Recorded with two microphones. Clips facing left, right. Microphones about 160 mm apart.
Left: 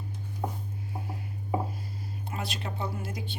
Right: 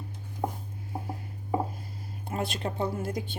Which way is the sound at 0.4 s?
30° right (ahead or behind).